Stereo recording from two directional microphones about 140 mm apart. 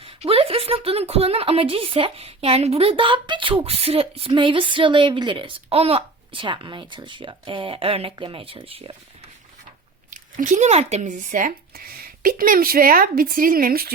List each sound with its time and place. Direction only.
0.0 s a woman's voice: 40° right (ahead or behind)
10.1 s speech: 65° right (ahead or behind); by 13.9 s 90° right